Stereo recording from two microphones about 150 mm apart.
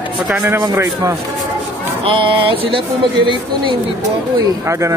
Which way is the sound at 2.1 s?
35° right (ahead or behind).